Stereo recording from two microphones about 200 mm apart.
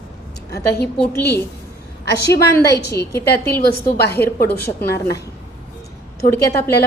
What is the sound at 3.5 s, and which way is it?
Speech, 50° left (ahead or behind).